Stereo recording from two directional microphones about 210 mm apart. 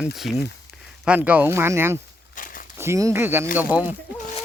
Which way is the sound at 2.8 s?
15° right (ahead or behind).